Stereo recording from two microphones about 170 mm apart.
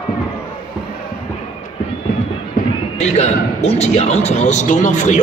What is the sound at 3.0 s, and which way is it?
A man's voice, 40° left (ahead or behind).